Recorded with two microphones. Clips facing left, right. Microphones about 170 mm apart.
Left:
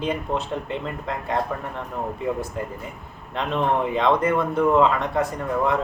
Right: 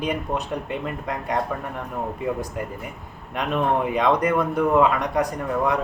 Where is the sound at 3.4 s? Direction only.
15° right (ahead or behind).